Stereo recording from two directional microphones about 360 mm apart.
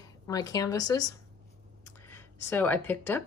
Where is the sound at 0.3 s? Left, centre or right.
Centre.